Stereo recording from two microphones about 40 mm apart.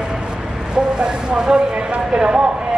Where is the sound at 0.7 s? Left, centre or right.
Right.